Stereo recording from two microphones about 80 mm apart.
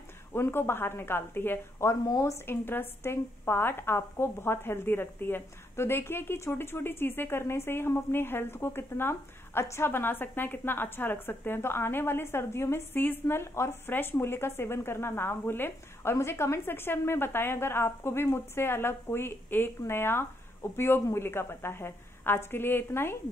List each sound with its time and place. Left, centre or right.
0.3 s a woman's voice: left
2.0 s speech: left
2.4 s a woman's voice: left